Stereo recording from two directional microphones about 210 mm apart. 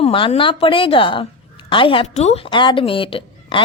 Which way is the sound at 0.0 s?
25° left (ahead or behind).